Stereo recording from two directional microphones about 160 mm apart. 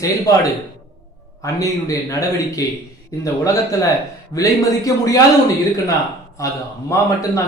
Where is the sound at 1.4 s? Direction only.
20° left (ahead or behind).